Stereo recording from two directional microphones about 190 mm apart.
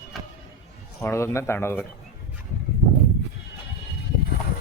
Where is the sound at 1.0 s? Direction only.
15° left (ahead or behind).